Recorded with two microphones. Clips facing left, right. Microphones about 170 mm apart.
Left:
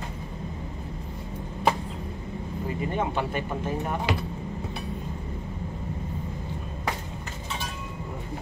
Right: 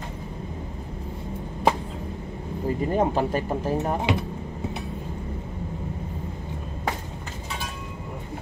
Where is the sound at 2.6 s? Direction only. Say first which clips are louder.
Right 6 dB; 40° right (ahead or behind).